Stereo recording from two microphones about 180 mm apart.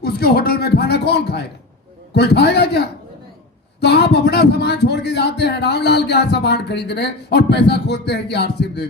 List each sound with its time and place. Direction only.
0.0 s speech: 60° left (ahead or behind)